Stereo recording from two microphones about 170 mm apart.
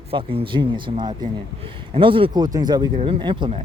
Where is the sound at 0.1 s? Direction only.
30° right (ahead or behind).